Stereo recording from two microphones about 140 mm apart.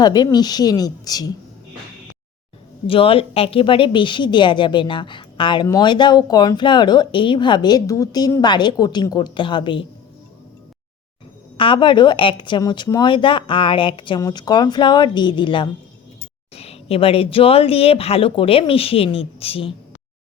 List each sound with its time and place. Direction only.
0.0 s a woman's voice: 30° left (ahead or behind)
2.8 s a woman's voice: 40° left (ahead or behind)
11.5 s a woman's voice: 40° left (ahead or behind)
16.6 s speech: 45° left (ahead or behind)